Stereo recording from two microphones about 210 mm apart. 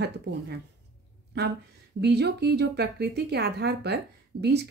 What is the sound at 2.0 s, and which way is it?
Speech, 50° right (ahead or behind).